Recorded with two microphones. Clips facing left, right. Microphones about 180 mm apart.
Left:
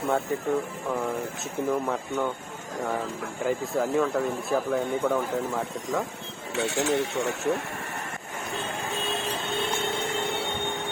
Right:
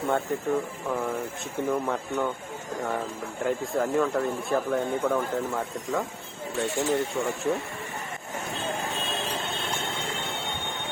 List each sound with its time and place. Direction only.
0.1 s speech: centre (ahead or behind)
3.4 s speech: centre (ahead or behind)
6.6 s speech: 80° left